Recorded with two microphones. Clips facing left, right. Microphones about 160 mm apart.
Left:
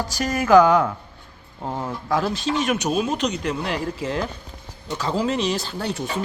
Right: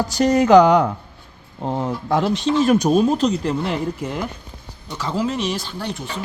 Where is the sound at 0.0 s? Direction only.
25° right (ahead or behind).